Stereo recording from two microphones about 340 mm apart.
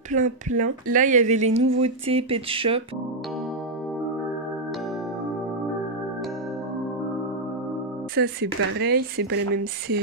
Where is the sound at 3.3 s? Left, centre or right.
Centre.